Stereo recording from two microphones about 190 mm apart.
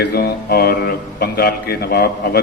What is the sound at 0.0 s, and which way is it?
A man's voice, 55° left (ahead or behind).